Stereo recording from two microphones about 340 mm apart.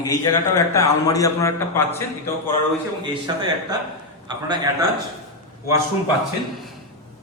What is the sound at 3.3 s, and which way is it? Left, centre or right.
A man's voice, centre.